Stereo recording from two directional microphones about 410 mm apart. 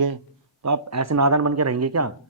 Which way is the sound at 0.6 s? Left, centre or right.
Right.